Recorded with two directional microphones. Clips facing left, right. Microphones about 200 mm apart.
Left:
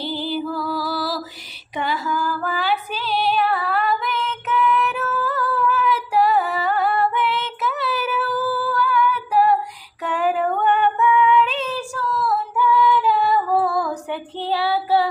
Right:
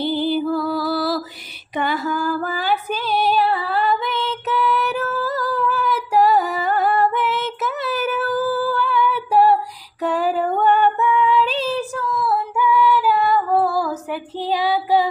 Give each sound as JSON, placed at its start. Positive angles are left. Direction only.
{"t": 0.0, "sound": "music", "side_deg": -55}
{"t": 1.7, "sound": "female singing", "side_deg": -55}
{"t": 3.4, "sound": "female singing", "side_deg": -30}
{"t": 8.7, "sound": "humming", "side_deg": -25}
{"t": 10.0, "sound": "female singing", "side_deg": -35}
{"t": 11.8, "sound": "female singing", "side_deg": -15}